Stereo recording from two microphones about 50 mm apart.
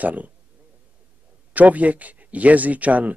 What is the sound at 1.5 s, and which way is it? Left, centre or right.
Speech, right.